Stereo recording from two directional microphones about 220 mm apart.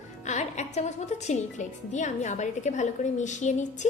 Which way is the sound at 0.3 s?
30° left (ahead or behind).